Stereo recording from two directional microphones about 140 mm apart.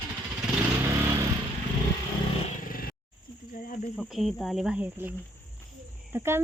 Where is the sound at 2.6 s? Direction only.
90° left.